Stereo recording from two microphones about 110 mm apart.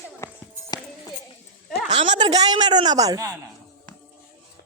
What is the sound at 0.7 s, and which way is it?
Music, 40° left (ahead or behind).